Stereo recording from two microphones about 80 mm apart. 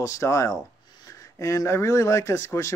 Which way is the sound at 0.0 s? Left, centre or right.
Left.